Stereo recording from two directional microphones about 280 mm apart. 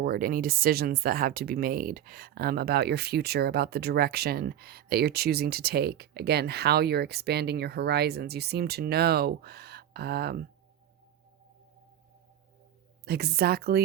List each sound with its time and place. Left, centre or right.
0.0 s speech: right
13.1 s speech: right